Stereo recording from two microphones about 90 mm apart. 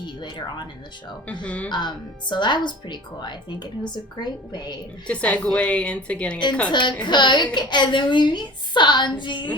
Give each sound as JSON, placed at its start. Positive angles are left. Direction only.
{"t": 0.0, "sound": "speech", "side_deg": 55}
{"t": 1.3, "sound": "a woman's voice", "side_deg": 15}
{"t": 2.3, "sound": "a woman's voice", "side_deg": 55}
{"t": 5.0, "sound": "a woman's voice", "side_deg": 15}
{"t": 6.7, "sound": "a woman's voice", "side_deg": 60}